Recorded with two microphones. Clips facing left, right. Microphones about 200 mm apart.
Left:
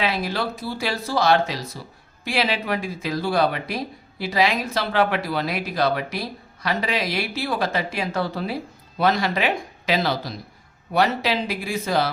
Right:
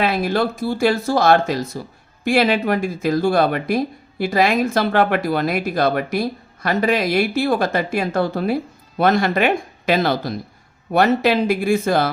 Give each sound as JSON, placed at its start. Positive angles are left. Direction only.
{"t": 0.0, "sound": "speech", "side_deg": -50}